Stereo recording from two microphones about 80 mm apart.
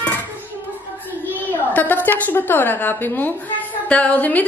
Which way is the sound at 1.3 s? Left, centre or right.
Left.